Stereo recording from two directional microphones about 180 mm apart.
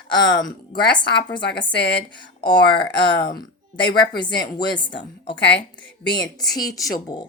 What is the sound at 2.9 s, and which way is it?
Speech, 75° left (ahead or behind).